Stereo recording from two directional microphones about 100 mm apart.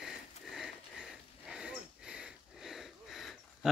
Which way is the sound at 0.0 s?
5° right (ahead or behind).